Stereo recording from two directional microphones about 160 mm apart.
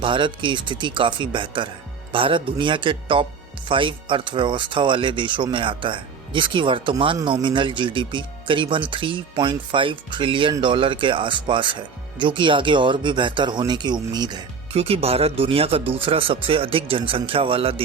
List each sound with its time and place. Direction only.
0.0 s speech: 30° right (ahead or behind)
14.7 s speech: 40° right (ahead or behind)